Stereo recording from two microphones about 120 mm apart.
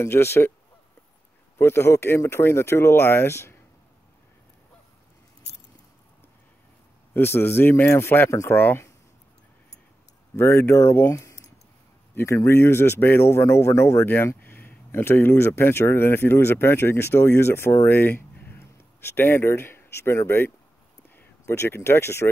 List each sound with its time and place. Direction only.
0.0 s speech: 20° left (ahead or behind)
1.6 s speech: 20° left (ahead or behind)
7.2 s speech: 20° left (ahead or behind)
10.3 s speech: 20° left (ahead or behind)